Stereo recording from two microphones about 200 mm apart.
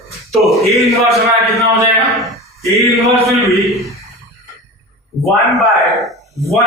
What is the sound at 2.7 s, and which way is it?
Mantra, 15° left (ahead or behind).